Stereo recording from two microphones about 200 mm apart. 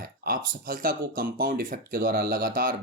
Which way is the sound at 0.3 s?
45° right (ahead or behind).